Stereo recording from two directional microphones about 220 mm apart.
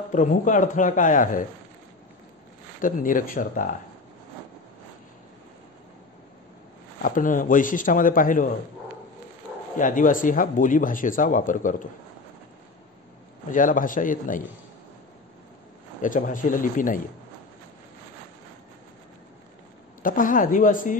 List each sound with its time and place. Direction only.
0.1 s speech: 35° left (ahead or behind)
2.8 s speech: 40° left (ahead or behind)
7.0 s speech: 40° left (ahead or behind)
9.8 s speech: 35° left (ahead or behind)
13.5 s speech: 35° left (ahead or behind)
16.0 s speech: 35° left (ahead or behind)
20.0 s speech: 40° left (ahead or behind)